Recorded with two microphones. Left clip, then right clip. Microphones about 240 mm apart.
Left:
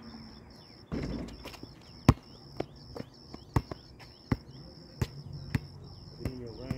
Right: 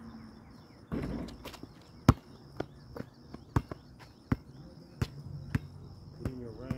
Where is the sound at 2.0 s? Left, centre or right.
Centre.